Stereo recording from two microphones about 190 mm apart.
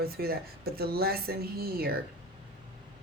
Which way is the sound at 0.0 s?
55° right (ahead or behind).